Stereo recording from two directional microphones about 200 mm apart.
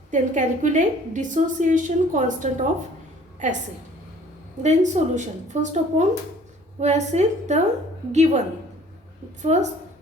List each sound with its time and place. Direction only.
0.1 s a woman's voice: 40° right (ahead or behind)
4.6 s a woman's voice: 35° right (ahead or behind)
9.4 s a woman's voice: 35° right (ahead or behind)